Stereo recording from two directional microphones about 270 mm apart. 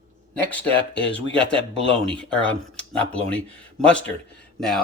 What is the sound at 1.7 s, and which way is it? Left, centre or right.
Speech, right.